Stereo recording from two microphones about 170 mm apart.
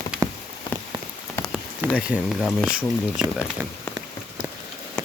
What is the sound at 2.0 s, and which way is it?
Speech, 5° right (ahead or behind).